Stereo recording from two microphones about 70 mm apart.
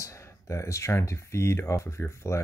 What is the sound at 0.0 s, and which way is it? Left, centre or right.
Speech, left.